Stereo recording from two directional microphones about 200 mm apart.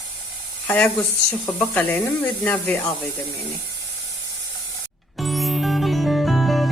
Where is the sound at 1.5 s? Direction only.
10° left (ahead or behind).